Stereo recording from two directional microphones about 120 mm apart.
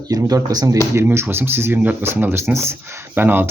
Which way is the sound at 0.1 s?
30° right (ahead or behind).